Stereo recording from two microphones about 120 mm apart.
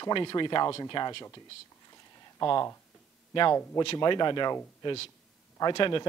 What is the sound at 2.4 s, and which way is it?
Speech, 30° left (ahead or behind).